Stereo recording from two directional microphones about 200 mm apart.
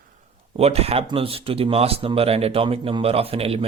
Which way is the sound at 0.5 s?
30° right (ahead or behind).